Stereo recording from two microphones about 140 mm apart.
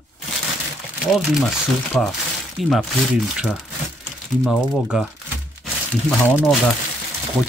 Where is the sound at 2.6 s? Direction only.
Centre (ahead or behind).